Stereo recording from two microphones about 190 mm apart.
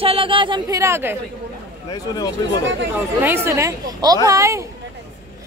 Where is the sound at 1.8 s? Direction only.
20° left (ahead or behind).